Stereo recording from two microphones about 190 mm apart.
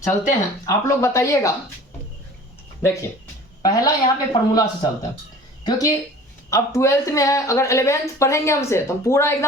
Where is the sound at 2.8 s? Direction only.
15° left (ahead or behind).